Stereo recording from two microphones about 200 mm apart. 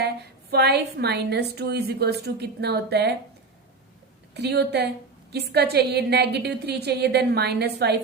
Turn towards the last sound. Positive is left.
turn(degrees=-55)  # may be behind; listen again after turning